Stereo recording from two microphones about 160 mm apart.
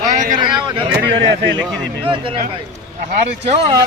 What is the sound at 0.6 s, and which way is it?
Speech, 30° right (ahead or behind).